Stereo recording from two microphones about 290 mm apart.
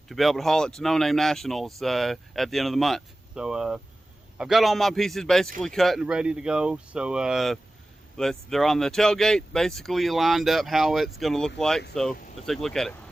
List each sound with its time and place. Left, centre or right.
0.1 s speech: centre